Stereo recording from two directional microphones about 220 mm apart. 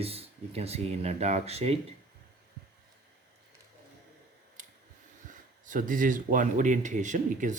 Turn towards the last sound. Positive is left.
turn(degrees=-35)  # may be behind; listen again after turning